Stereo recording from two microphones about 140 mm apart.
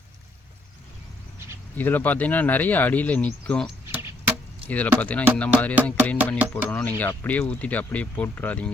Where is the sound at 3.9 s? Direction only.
15° right (ahead or behind).